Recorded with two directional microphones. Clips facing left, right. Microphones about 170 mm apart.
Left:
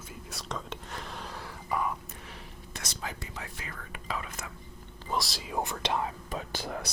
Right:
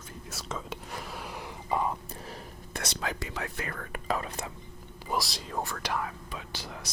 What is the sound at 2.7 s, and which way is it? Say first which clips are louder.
Speech: right 5 dB; 65° right (ahead or behind).